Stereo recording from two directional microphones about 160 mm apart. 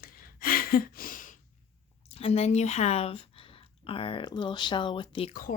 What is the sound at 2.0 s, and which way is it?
Speech, 40° left (ahead or behind).